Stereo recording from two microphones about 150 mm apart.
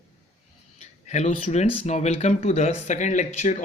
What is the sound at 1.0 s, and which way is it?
Speech, 50° left (ahead or behind).